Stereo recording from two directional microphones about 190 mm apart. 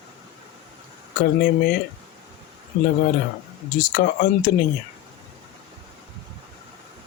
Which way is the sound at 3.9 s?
50° left (ahead or behind).